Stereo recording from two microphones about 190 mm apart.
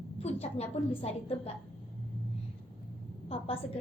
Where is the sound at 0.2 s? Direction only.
35° left (ahead or behind).